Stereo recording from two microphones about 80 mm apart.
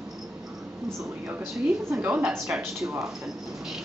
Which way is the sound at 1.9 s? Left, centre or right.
Centre.